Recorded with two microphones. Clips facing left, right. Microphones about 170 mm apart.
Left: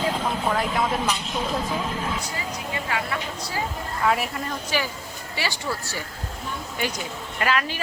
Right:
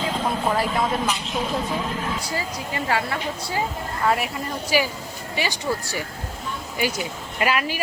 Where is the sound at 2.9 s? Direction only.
35° right (ahead or behind).